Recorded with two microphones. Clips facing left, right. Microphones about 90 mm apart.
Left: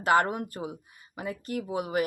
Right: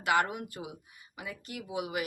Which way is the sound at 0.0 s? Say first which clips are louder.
Left 5 dB; 40° left (ahead or behind).